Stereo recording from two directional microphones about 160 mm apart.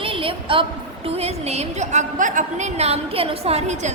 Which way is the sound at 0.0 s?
35° right (ahead or behind).